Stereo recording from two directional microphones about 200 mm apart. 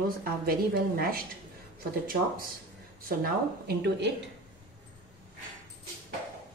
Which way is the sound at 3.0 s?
50° right (ahead or behind).